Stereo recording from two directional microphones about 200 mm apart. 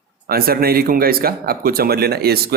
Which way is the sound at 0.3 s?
50° right (ahead or behind).